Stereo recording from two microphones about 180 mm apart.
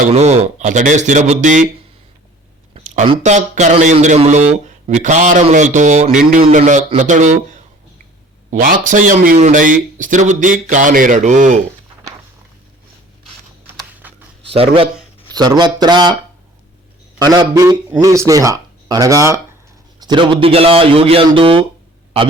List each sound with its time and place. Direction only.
0.1 s speech: 35° right (ahead or behind)
2.7 s a sound: 40° right (ahead or behind)
3.2 s speech: 40° right (ahead or behind)
8.4 s speech: 45° right (ahead or behind)
14.4 s a man's voice: 30° right (ahead or behind)
17.2 s a man's voice: 20° right (ahead or behind)